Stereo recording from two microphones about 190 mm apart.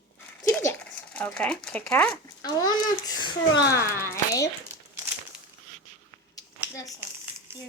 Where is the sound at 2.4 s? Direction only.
20° left (ahead or behind).